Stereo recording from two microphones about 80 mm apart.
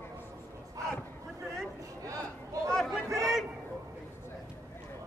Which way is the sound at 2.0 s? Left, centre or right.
Right.